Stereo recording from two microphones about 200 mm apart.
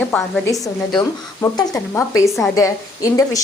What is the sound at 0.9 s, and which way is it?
A woman's voice, 20° left (ahead or behind).